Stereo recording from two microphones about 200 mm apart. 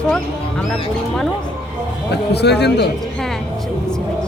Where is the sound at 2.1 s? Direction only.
55° left (ahead or behind).